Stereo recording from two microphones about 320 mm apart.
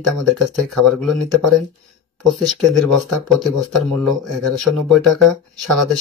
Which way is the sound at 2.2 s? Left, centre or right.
Centre.